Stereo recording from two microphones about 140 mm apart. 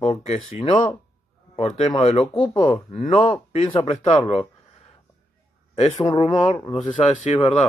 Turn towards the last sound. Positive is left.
turn(degrees=45)  # may be behind; listen again after turning